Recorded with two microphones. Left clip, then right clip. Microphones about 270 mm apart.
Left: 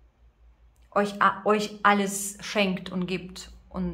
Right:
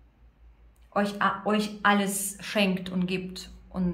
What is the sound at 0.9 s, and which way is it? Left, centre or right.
A woman's voice, centre.